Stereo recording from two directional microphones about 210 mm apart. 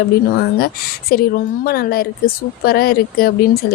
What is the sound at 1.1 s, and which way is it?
A woman's voice, 45° left (ahead or behind).